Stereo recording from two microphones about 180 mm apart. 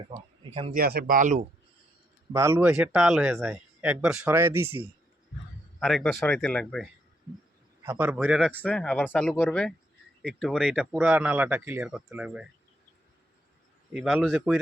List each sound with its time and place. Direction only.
0.1 s speech: 30° right (ahead or behind)
0.7 s speech: 55° right (ahead or behind)
2.3 s speech: 15° right (ahead or behind)
5.8 s speech: centre (ahead or behind)
7.9 s speech: 10° right (ahead or behind)
8.4 s speech: 5° left (ahead or behind)
13.9 s speech: centre (ahead or behind)